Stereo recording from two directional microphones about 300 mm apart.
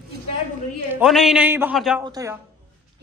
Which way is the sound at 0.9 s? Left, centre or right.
Centre.